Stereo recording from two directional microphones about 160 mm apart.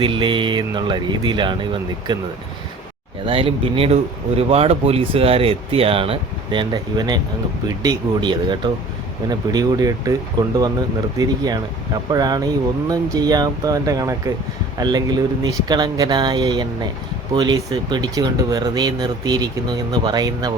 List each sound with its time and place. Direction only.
0.0 s speech: 30° right (ahead or behind)
3.2 s speech: 35° right (ahead or behind)